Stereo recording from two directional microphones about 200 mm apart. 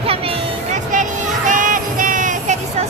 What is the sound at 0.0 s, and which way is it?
Music, 30° right (ahead or behind).